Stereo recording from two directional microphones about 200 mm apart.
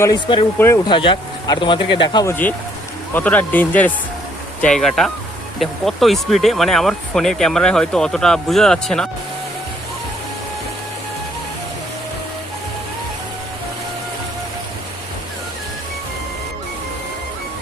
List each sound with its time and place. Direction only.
0.0 s speech: 20° left (ahead or behind)
2.3 s speech: 10° left (ahead or behind)